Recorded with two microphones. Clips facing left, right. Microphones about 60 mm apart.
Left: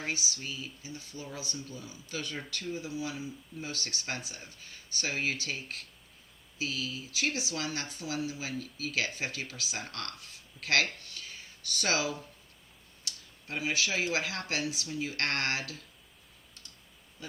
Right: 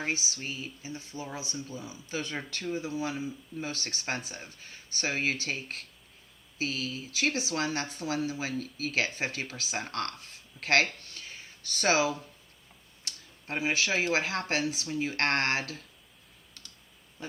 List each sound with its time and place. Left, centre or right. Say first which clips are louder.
0.0 s speech: right 3 dB; right